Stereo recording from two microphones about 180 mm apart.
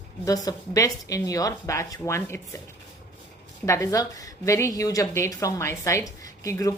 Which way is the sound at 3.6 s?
15° left (ahead or behind).